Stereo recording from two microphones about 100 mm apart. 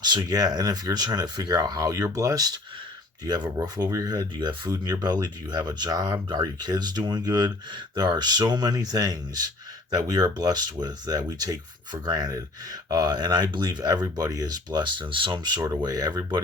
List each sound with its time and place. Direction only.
0.2 s speech: 40° right (ahead or behind)